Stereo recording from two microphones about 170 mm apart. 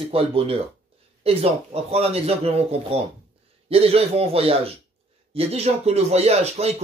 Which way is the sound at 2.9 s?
35° right (ahead or behind).